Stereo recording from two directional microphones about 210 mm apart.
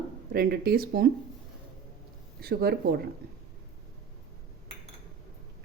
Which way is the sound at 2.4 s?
45° right (ahead or behind).